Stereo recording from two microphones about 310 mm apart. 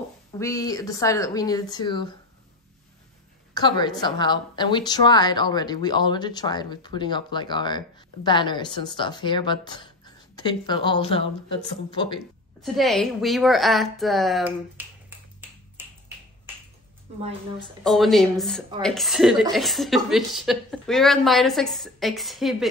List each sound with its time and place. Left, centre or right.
0.3 s a woman's voice: centre
3.5 s a woman's voice: centre
12.6 s a woman's voice: centre
17.2 s a woman's voice: centre
17.8 s a woman's voice: centre